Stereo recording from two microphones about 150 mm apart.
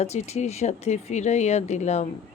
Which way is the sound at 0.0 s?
45° left (ahead or behind).